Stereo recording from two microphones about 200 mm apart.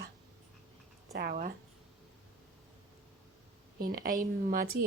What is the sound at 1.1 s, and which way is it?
Speech, 50° right (ahead or behind).